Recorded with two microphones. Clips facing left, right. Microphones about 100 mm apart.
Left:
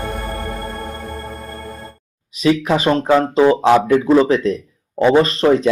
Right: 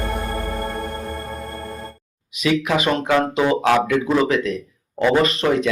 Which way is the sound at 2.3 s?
35° left (ahead or behind).